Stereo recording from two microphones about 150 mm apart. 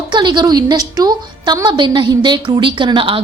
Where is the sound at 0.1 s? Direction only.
30° right (ahead or behind).